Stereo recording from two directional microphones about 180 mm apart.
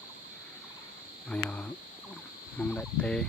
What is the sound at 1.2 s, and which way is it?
Cricket, 5° left (ahead or behind).